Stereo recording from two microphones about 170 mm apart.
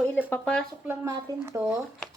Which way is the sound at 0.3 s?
5° left (ahead or behind).